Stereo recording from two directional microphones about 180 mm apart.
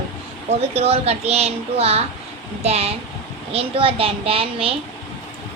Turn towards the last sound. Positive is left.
turn(degrees=-30)  # may be behind; listen again after turning